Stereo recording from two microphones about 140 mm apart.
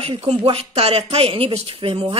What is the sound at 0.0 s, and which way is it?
Speech, 45° right (ahead or behind).